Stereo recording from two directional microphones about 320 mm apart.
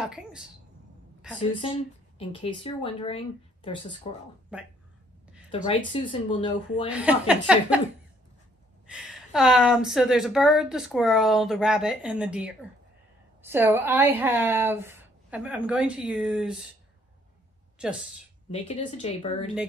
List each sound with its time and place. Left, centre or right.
0.0 s a woman's voice: centre
2.1 s speech: centre
4.5 s a woman's voice: centre
5.5 s speech: centre
6.9 s a woman's voice: centre
8.8 s a woman's voice: centre
18.5 s speech: centre